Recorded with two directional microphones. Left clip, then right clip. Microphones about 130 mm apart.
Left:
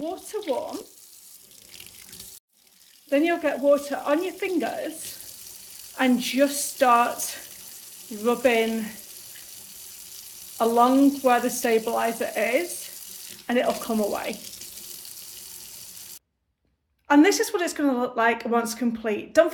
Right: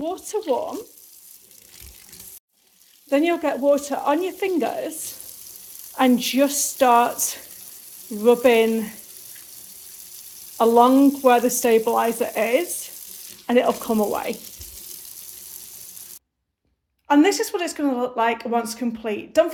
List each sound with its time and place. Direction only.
0.3 s speech: 70° right (ahead or behind)
3.1 s speech: 65° right (ahead or behind)
6.0 s speech: 55° right (ahead or behind)
10.6 s speech: 60° right (ahead or behind)
17.1 s speech: 10° right (ahead or behind)